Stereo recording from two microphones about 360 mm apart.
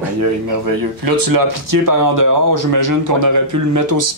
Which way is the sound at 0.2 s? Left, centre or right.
Right.